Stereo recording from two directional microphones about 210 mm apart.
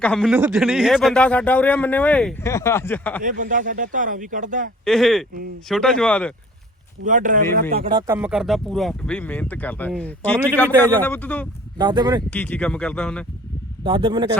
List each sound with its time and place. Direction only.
0.0 s speech: 5° left (ahead or behind)
3.2 s speech: 40° right (ahead or behind)
4.9 s speech: centre (ahead or behind)
7.0 s speech: 40° right (ahead or behind)
7.9 s speech: 15° right (ahead or behind); by 11.4 s 10° left (ahead or behind)
11.8 s speech: 20° right (ahead or behind)
12.3 s speech: 5° left (ahead or behind)
13.8 s speech: 25° right (ahead or behind)